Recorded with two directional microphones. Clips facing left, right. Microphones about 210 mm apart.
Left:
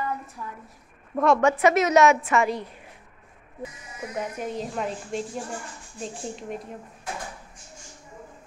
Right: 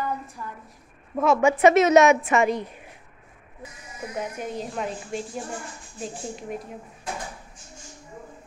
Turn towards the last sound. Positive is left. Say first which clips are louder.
# even
turn(degrees=-5)  # may be behind; listen again after turning